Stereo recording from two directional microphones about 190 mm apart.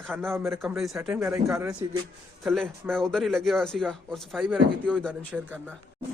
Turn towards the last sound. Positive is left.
turn(degrees=5)  # may be behind; listen again after turning